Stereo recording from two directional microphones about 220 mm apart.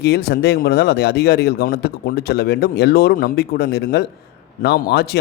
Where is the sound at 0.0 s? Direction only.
50° left (ahead or behind).